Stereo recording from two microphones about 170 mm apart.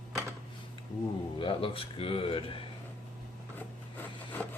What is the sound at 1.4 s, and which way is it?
Speech, 30° left (ahead or behind).